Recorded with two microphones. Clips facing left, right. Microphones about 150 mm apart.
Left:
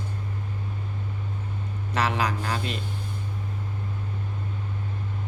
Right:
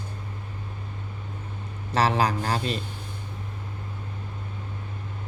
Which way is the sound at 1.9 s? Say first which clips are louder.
Right 3 dB; 35° right (ahead or behind).